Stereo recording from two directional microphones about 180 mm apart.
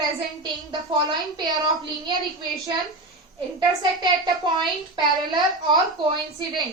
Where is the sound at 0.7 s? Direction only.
25° right (ahead or behind).